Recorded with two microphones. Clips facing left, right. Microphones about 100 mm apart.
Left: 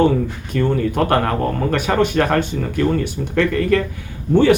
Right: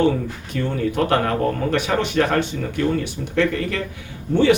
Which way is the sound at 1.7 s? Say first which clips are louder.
Left 3 dB; 50° left (ahead or behind).